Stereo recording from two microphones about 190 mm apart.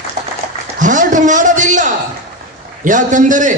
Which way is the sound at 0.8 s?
40° right (ahead or behind).